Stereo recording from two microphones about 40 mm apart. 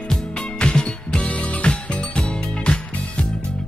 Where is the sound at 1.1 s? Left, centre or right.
Left.